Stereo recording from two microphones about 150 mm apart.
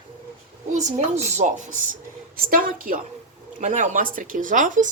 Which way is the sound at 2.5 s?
70° right (ahead or behind).